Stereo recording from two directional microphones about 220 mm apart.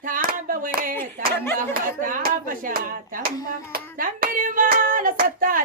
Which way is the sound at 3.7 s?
40° right (ahead or behind).